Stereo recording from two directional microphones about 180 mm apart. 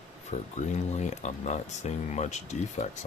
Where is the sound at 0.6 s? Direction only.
40° left (ahead or behind).